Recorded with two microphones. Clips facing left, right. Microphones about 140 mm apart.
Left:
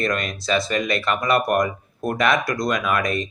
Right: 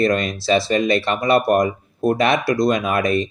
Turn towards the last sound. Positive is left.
turn(degrees=-30)  # may be behind; listen again after turning